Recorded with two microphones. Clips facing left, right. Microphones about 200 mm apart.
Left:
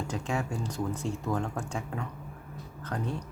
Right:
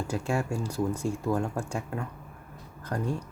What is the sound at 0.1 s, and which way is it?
Speech, 10° right (ahead or behind).